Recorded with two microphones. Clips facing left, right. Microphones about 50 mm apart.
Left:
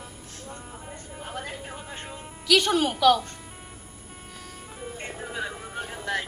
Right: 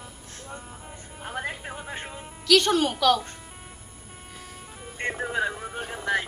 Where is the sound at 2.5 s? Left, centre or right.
Centre.